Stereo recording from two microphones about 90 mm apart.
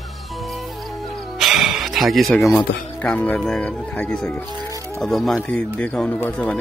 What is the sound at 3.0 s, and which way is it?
Speech, 15° left (ahead or behind).